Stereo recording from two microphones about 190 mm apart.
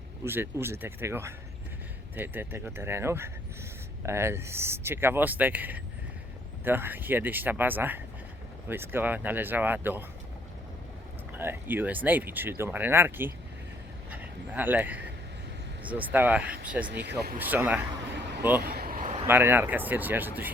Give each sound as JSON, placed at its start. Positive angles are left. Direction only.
{"t": 0.3, "sound": "speech", "side_deg": -10}
{"t": 11.3, "sound": "a man's voice", "side_deg": -10}
{"t": 16.8, "sound": "speech", "side_deg": -60}
{"t": 17.3, "sound": "speech", "side_deg": -10}
{"t": 18.6, "sound": "a sound", "side_deg": -55}
{"t": 19.3, "sound": "speech", "side_deg": -10}